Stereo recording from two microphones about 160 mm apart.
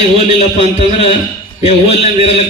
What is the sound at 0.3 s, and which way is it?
A man's voice, 40° left (ahead or behind).